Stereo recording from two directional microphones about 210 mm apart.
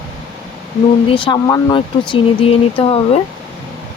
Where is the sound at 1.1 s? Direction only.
20° left (ahead or behind).